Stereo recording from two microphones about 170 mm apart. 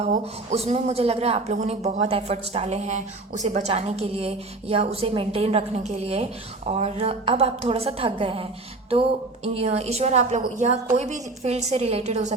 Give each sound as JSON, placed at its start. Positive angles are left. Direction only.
{"t": 0.0, "sound": "a woman's voice", "side_deg": -40}